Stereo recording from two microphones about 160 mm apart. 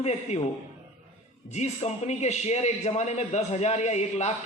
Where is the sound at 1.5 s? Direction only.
45° left (ahead or behind).